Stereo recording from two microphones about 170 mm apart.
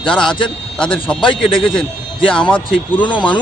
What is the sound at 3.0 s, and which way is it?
Speech, 30° left (ahead or behind).